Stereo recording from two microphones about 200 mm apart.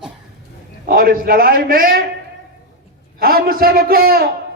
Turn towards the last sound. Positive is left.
turn(degrees=-50)  # may be behind; listen again after turning